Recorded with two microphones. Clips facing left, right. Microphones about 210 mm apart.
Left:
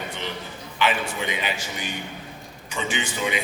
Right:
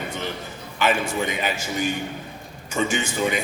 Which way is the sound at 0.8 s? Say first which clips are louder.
Right 3 dB; 45° right (ahead or behind).